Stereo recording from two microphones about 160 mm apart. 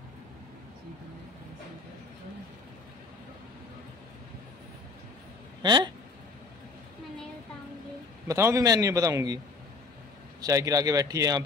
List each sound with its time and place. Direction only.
5.6 s speech: 30° right (ahead or behind)
8.3 s a man's voice: 20° right (ahead or behind)
10.4 s a man's voice: 20° right (ahead or behind)